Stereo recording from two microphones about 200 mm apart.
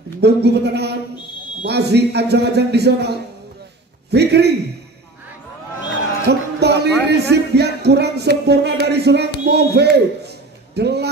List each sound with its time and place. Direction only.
0.2 s speech: 55° right (ahead or behind)
6.2 s basketball bounce: 55° right (ahead or behind)
7.1 s a man's voice: 55° right (ahead or behind)